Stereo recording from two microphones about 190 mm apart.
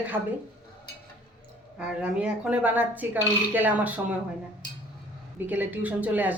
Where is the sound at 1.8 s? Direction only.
5° right (ahead or behind).